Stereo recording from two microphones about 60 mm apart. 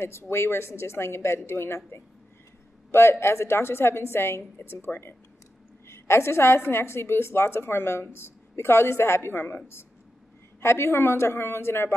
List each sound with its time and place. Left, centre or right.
0.0 s a woman's voice: left
2.9 s a woman's voice: left
10.6 s a woman's voice: left